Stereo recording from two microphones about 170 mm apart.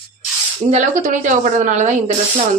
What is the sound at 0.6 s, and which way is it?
A woman's voice, 45° right (ahead or behind).